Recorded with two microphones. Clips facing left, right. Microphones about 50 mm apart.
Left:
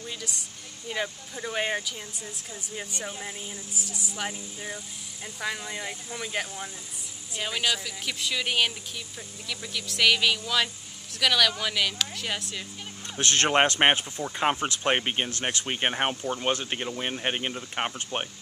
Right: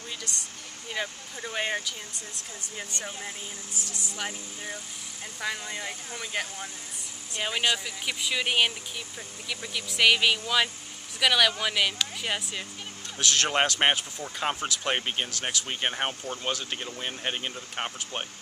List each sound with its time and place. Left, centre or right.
0.8 s speech: centre
7.4 s speech: centre
13.2 s speech: left
13.6 s speech: left